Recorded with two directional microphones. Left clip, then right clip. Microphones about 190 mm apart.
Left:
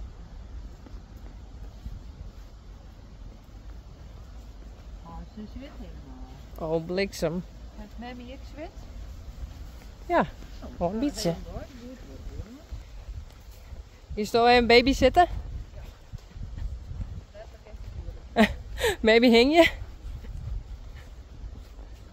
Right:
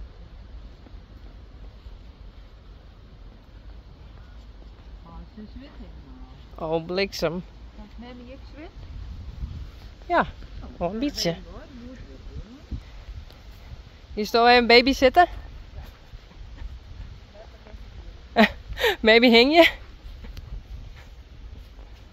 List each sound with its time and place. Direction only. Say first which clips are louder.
6.6 s speech: right 2 dB; centre (ahead or behind)
10.0 s speech: right 2 dB; 15° left (ahead or behind)
14.1 s speech: right 3 dB; 20° right (ahead or behind)
18.3 s speech: right 4 dB; 15° right (ahead or behind)